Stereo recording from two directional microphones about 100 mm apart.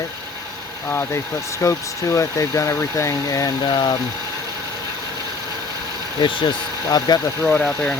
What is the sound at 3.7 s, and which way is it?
Speech, 45° left (ahead or behind).